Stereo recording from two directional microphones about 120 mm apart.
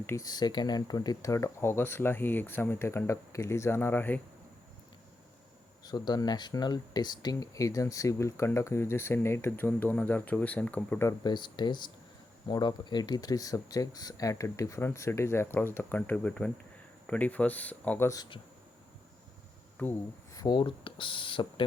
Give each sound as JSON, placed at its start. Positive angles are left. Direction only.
{"t": 0.0, "sound": "speech", "side_deg": 20}
{"t": 0.3, "sound": "speech", "side_deg": 35}
{"t": 5.8, "sound": "speech", "side_deg": 35}
{"t": 11.2, "sound": "speech", "side_deg": 40}
{"t": 19.7, "sound": "speech", "side_deg": 15}
{"t": 20.3, "sound": "speech", "side_deg": 35}